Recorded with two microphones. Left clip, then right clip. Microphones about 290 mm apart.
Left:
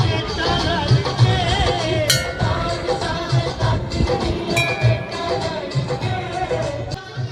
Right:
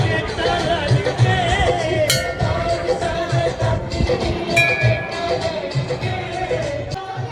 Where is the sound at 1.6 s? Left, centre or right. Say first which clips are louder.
Right 2 dB; centre.